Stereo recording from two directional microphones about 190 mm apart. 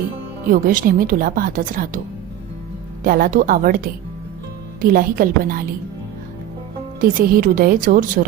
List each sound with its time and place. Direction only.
0.5 s a woman's voice: 45° right (ahead or behind)
3.0 s a woman's voice: 45° right (ahead or behind)
7.0 s a woman's voice: 45° right (ahead or behind)